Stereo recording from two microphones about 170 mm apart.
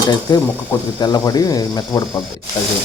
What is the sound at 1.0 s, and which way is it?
Frying, 25° left (ahead or behind).